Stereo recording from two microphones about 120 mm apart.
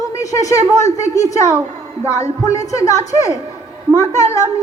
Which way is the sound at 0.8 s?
75° left (ahead or behind).